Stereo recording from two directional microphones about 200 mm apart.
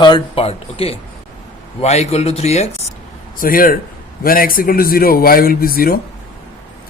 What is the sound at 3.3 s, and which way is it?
Speech, 45° left (ahead or behind).